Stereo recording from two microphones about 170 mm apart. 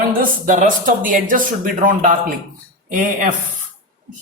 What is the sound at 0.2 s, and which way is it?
Speech, 50° right (ahead or behind).